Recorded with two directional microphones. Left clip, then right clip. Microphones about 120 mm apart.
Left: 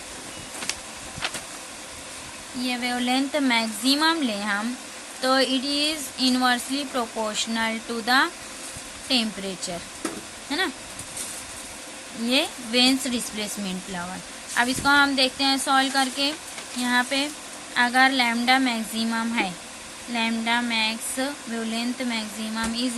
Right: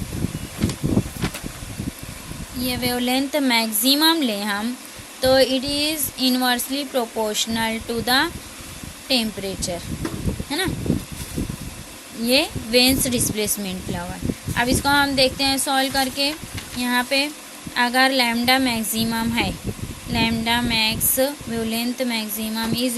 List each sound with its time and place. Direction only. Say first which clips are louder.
2.6 s speech: right 3 dB; 55° right (ahead or behind)
5.2 s speech: right 5 dB; 40° right (ahead or behind)
12.3 s speech: right 5 dB; 60° right (ahead or behind)